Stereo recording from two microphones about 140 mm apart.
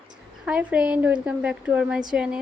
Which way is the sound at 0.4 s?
10° right (ahead or behind).